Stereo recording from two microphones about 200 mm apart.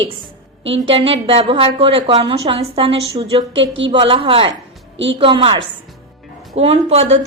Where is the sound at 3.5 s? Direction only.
65° right (ahead or behind).